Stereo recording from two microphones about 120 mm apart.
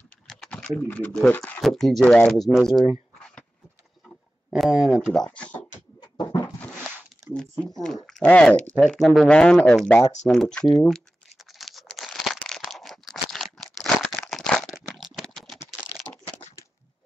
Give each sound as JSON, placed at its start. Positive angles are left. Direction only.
{"t": 0.3, "sound": "typing", "side_deg": 5}
{"t": 0.9, "sound": "speech", "side_deg": 10}
{"t": 4.5, "sound": "speech", "side_deg": -5}
{"t": 5.9, "sound": "a sound", "side_deg": 35}
{"t": 6.6, "sound": "a sound", "side_deg": 5}
{"t": 7.6, "sound": "speech", "side_deg": 5}
{"t": 11.5, "sound": "crumpling", "side_deg": 0}